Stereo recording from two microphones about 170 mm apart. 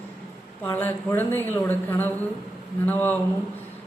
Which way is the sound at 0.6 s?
10° left (ahead or behind).